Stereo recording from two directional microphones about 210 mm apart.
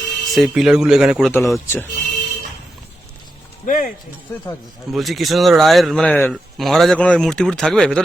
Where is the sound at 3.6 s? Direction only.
40° left (ahead or behind).